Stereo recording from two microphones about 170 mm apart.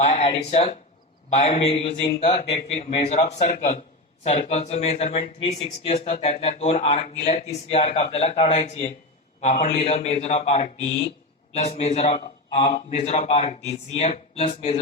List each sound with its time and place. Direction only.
0.1 s speech: 40° left (ahead or behind)